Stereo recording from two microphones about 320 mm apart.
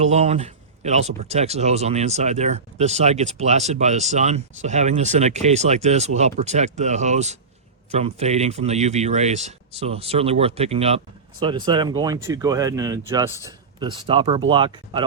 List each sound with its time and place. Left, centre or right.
0.0 s speech: centre